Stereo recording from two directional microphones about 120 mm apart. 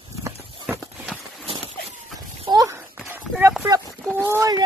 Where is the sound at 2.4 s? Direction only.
35° right (ahead or behind).